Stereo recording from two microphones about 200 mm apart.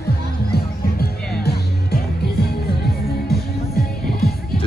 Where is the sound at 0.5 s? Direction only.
50° left (ahead or behind).